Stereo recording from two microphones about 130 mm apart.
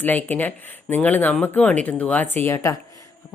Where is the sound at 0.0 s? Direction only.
15° left (ahead or behind).